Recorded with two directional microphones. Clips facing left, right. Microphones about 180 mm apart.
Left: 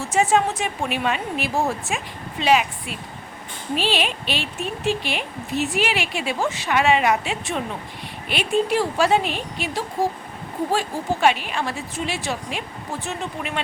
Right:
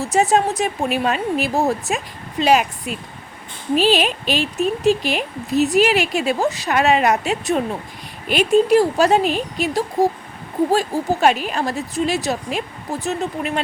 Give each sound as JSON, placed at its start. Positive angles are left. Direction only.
{"t": 0.0, "sound": "speech", "side_deg": -35}